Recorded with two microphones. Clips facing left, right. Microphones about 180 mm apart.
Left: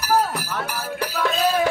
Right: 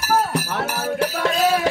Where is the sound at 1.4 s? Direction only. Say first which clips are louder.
Right 1 dB; 90° right.